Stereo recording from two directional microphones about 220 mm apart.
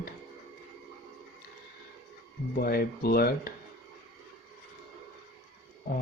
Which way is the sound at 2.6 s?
45° left (ahead or behind).